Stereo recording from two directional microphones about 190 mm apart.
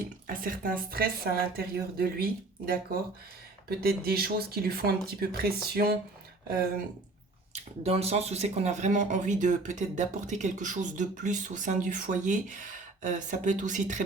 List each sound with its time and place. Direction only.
0.3 s a woman's voice: 45° right (ahead or behind)
7.5 s speech: 35° right (ahead or behind)